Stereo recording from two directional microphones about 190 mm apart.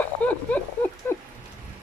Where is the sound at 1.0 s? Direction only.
10° left (ahead or behind).